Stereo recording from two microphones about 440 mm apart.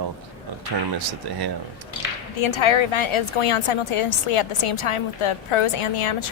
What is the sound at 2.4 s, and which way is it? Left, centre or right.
A woman's voice, left.